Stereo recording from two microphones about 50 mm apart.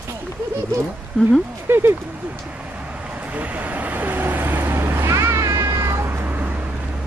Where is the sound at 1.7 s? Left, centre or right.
Right.